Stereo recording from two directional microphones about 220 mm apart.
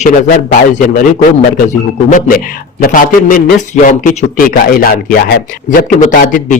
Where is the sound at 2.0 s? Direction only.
35° left (ahead or behind).